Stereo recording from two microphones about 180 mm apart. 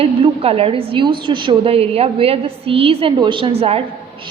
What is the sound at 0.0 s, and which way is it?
A woman's voice, 35° right (ahead or behind).